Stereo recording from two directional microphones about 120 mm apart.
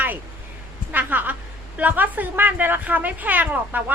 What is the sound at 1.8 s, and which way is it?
A woman's voice, 15° right (ahead or behind).